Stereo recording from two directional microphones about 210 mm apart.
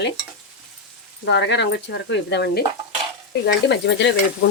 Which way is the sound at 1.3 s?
55° left (ahead or behind).